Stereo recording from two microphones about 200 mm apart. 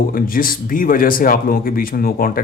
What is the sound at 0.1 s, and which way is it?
Speech, 45° left (ahead or behind).